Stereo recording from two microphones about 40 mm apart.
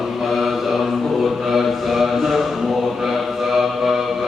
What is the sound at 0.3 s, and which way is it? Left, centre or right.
Mantra, centre.